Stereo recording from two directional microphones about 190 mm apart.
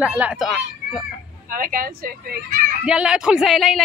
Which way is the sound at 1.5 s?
45° right (ahead or behind).